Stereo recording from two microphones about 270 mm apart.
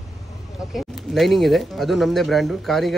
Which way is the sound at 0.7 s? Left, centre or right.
Centre.